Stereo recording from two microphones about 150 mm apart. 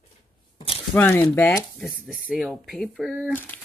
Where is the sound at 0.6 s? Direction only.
40° left (ahead or behind).